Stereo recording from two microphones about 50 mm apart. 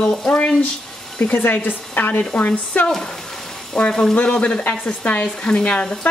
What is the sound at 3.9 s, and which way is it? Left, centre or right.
Speech, centre.